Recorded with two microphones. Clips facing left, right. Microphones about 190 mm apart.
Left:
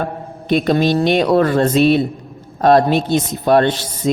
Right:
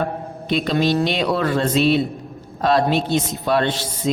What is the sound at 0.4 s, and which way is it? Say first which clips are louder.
Speech: left 5 dB; 50° left (ahead or behind).